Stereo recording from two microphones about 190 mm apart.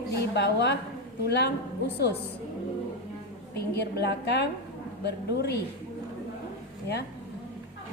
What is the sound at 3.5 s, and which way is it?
A woman's voice, 60° left (ahead or behind).